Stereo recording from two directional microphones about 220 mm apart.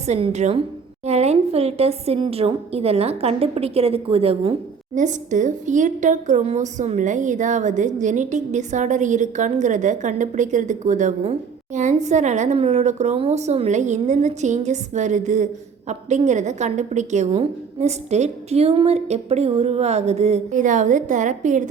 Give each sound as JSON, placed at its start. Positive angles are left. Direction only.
{"t": 0.0, "sound": "a woman's voice", "side_deg": -30}